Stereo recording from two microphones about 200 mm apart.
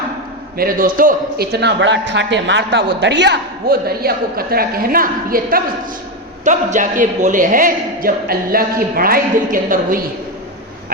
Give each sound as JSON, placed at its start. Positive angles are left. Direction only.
{"t": 0.5, "sound": "a man's voice", "side_deg": -45}